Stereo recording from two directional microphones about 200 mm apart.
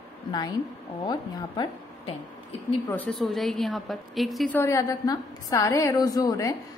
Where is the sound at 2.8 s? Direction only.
10° left (ahead or behind).